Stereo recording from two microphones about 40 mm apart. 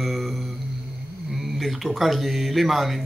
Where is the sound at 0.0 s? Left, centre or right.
Centre.